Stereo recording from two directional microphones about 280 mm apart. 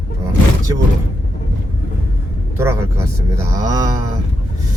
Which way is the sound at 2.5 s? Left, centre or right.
Centre.